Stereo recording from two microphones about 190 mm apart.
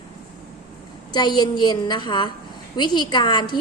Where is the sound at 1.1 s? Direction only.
20° left (ahead or behind).